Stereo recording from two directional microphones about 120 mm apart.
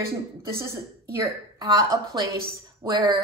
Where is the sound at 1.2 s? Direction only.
30° right (ahead or behind).